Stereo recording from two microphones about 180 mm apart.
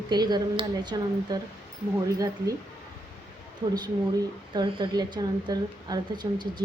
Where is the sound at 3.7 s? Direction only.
25° right (ahead or behind).